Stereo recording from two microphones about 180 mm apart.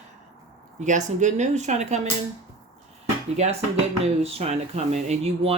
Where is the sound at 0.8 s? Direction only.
45° right (ahead or behind).